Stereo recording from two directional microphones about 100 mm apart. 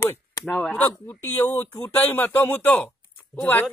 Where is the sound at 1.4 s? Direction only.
20° left (ahead or behind).